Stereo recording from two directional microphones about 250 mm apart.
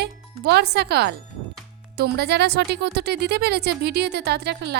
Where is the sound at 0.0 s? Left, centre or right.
Right.